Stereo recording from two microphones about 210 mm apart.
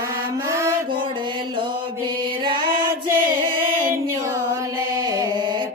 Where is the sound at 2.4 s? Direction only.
25° right (ahead or behind).